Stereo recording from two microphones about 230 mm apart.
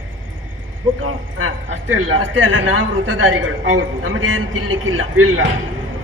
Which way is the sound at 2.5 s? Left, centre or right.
Right.